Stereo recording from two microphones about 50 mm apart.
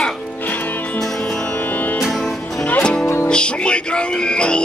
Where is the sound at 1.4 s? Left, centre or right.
Left.